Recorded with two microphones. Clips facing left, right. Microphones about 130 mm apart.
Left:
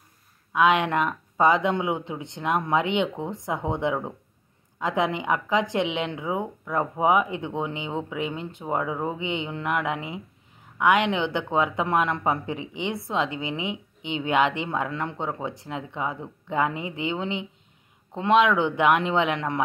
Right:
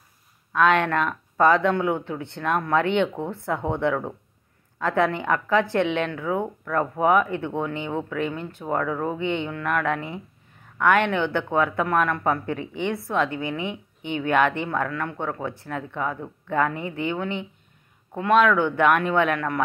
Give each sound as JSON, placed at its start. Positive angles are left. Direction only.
{"t": 0.5, "sound": "speech", "side_deg": 15}